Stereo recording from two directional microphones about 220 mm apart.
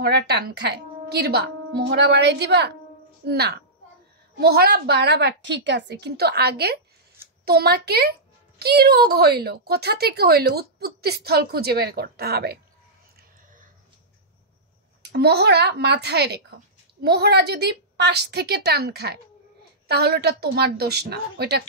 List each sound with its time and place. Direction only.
0.0 s speech: 45° right (ahead or behind)
15.0 s speech: 50° right (ahead or behind)